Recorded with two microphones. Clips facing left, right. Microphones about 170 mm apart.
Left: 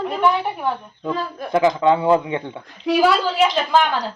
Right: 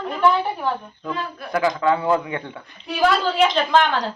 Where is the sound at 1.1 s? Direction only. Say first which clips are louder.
Left 4 dB; 35° left (ahead or behind).